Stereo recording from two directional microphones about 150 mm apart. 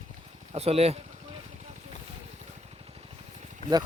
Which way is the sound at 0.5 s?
40° right (ahead or behind).